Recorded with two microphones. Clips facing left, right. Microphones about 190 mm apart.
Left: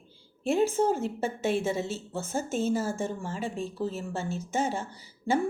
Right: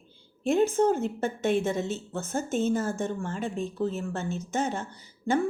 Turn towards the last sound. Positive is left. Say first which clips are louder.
# right 1 dB
turn(degrees=10)  # may be behind; listen again after turning